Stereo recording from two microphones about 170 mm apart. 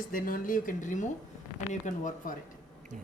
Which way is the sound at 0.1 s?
55° left (ahead or behind).